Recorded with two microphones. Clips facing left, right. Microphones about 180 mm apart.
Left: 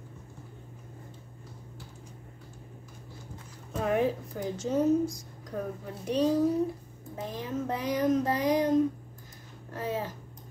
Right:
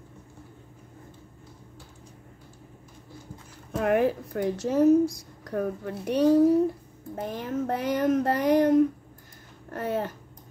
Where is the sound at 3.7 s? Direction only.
65° right (ahead or behind).